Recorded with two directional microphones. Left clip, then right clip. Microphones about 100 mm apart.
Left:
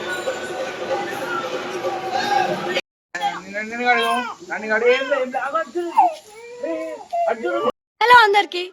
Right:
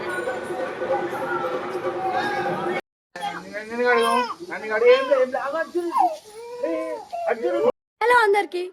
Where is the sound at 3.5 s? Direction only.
65° right (ahead or behind).